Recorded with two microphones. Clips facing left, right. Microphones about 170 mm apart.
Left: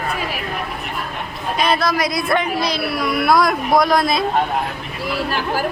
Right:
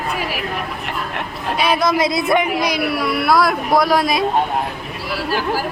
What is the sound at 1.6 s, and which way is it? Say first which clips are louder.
A man's voice: right 2 dB; 15° right (ahead or behind).